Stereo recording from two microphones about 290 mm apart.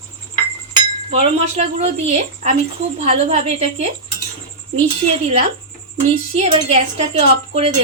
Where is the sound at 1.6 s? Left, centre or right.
Right.